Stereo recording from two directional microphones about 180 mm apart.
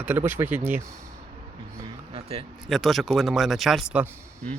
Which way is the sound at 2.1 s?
30° right (ahead or behind).